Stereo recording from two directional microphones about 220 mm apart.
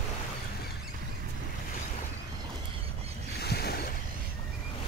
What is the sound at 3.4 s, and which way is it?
Boat, 45° left (ahead or behind).